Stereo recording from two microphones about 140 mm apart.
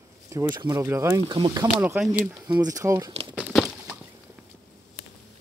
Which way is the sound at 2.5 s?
25° right (ahead or behind).